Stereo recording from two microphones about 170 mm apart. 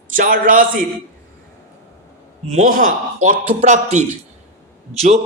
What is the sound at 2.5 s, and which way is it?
Speech, 50° right (ahead or behind).